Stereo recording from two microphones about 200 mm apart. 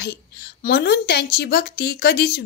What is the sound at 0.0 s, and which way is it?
A woman's voice, 55° left (ahead or behind).